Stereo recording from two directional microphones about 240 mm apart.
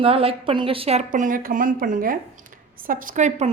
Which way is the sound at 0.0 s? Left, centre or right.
Right.